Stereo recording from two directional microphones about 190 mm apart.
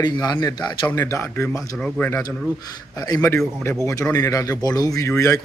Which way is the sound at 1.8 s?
5° left (ahead or behind).